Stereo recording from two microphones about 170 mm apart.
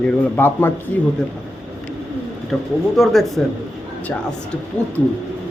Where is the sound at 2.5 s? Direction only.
Centre (ahead or behind).